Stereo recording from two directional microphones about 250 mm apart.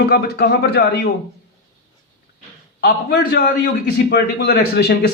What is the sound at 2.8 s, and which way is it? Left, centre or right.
Speech, left.